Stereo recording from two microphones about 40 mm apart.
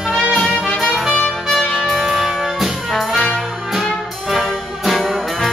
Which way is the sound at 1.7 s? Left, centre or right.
Centre.